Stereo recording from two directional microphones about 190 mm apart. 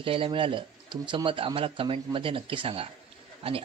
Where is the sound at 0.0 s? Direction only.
30° right (ahead or behind).